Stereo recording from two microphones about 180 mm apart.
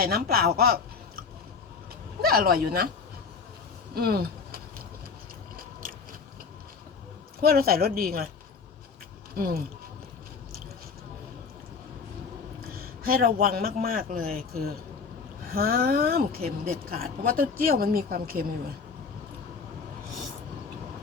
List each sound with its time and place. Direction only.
0.0 s speech: 60° right (ahead or behind)
2.2 s speech: 55° right (ahead or behind)
3.9 s speech: 60° right (ahead or behind)
7.4 s speech: 55° right (ahead or behind)
9.3 s speech: 55° right (ahead or behind)
12.8 s a man's voice: 55° right (ahead or behind)